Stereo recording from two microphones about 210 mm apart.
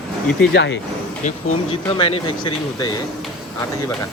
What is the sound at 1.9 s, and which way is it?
Speech, 20° left (ahead or behind).